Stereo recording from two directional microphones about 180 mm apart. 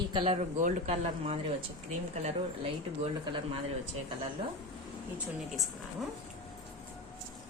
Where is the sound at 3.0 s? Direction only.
30° right (ahead or behind).